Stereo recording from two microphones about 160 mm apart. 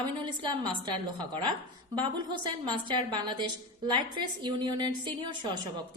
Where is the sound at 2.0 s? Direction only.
30° right (ahead or behind).